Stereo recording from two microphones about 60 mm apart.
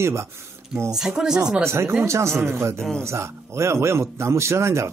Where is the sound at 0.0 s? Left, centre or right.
Right.